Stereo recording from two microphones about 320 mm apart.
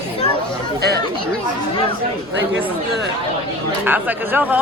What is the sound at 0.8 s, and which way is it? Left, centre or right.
Speech, right.